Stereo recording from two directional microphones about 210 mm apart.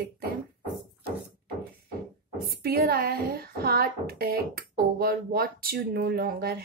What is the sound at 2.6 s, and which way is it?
A woman's voice, 45° right (ahead or behind).